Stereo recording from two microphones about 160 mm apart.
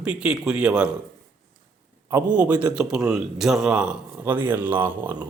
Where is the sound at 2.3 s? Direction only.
10° right (ahead or behind).